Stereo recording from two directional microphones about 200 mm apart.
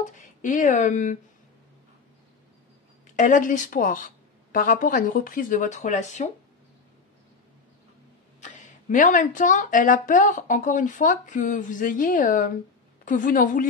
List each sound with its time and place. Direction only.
0.0 s speech: 40° left (ahead or behind)
3.2 s speech: 40° left (ahead or behind)
8.4 s speech: 35° left (ahead or behind)